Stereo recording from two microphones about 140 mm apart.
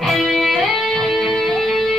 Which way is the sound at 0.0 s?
Centre (ahead or behind).